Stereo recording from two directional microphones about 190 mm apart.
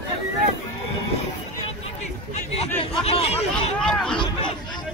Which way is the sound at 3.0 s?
30° left (ahead or behind).